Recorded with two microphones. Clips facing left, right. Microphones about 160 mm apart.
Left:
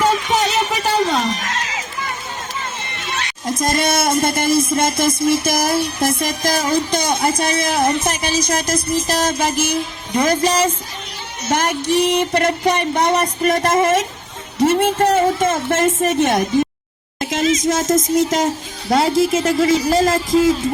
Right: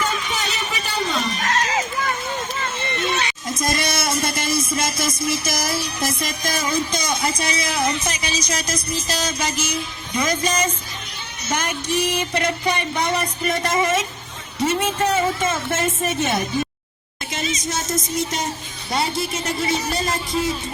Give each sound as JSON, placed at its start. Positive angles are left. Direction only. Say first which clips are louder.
{"t": 0.3, "sound": "a sound", "louder": "left 9 dB", "side_deg": 85}
{"t": 1.5, "sound": "run", "louder": "right 4 dB", "side_deg": -40}
{"t": 3.4, "sound": "a sound", "louder": "left 9 dB", "side_deg": 50}
{"t": 6.7, "sound": "speech", "louder": "left 3 dB", "side_deg": 60}
{"t": 11.5, "sound": "music", "louder": "left 6 dB", "side_deg": 70}
{"t": 13.2, "sound": "a woman's voice", "louder": "left 6 dB", "side_deg": 50}
{"t": 17.2, "sound": "speech", "louder": "left 10 dB", "side_deg": 90}